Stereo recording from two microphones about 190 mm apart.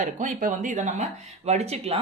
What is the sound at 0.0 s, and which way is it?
A woman's voice, 40° right (ahead or behind).